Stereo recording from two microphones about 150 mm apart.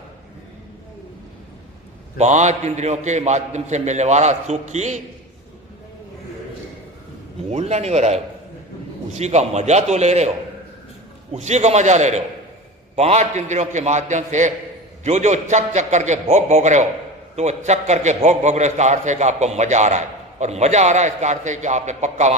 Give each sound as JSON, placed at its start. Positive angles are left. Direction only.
{"t": 2.1, "sound": "a man's voice", "side_deg": -50}
{"t": 7.5, "sound": "a man's voice", "side_deg": -45}
{"t": 11.3, "sound": "a man's voice", "side_deg": -50}